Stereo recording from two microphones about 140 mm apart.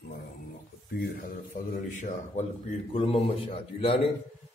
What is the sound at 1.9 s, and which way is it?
Speech, 60° left (ahead or behind).